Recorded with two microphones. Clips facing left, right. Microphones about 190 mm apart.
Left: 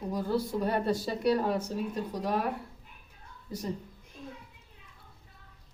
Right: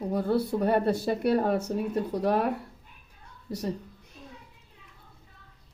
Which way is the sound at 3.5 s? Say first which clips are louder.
Right 4 dB; 70° right (ahead or behind).